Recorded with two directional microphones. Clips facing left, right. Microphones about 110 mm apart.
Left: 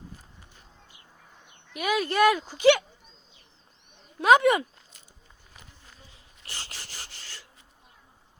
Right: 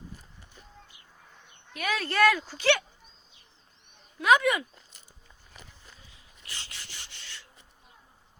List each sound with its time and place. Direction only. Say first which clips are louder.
1.7 s speech: left 4 dB; 15° left (ahead or behind)
4.2 s speech: left 4 dB; 30° left (ahead or behind)
6.4 s a sound: left 3 dB; 35° left (ahead or behind)